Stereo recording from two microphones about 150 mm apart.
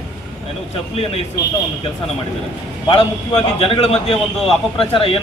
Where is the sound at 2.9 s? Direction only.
40° left (ahead or behind).